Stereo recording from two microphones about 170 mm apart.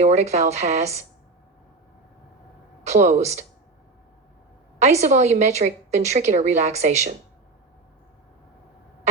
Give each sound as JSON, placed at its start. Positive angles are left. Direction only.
{"t": 0.0, "sound": "a woman's voice", "side_deg": -40}
{"t": 2.8, "sound": "a woman's voice", "side_deg": -40}
{"t": 4.8, "sound": "a woman's voice", "side_deg": -40}